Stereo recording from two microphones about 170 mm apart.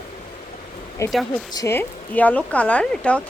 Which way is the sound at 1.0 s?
15° left (ahead or behind).